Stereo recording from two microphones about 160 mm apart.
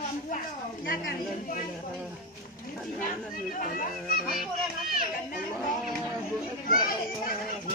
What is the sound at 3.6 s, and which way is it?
Speech, 60° left (ahead or behind).